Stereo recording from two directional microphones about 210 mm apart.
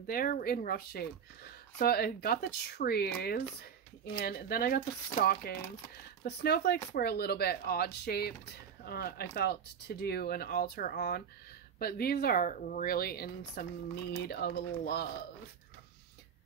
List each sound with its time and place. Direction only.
0.0 s speech: 40° left (ahead or behind)